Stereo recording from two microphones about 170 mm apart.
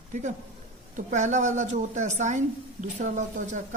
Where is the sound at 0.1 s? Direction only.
45° right (ahead or behind).